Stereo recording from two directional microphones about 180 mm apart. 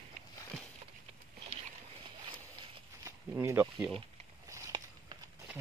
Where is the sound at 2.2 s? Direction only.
25° right (ahead or behind).